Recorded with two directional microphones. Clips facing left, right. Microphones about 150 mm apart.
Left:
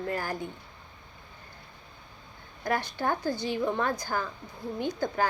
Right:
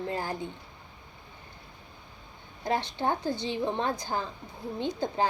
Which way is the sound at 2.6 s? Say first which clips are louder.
Even; 25° right (ahead or behind).